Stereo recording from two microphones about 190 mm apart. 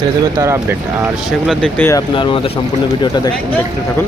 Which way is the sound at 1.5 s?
5° left (ahead or behind).